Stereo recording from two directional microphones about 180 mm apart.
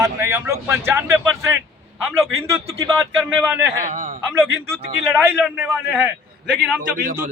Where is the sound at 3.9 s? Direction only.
45° right (ahead or behind).